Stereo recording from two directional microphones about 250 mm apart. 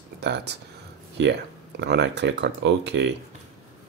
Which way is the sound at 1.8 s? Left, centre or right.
Right.